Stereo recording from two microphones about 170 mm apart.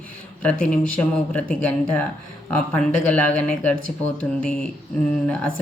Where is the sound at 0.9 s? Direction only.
5° left (ahead or behind).